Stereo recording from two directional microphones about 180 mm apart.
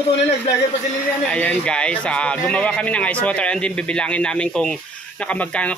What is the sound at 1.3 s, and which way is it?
Speech, 10° left (ahead or behind).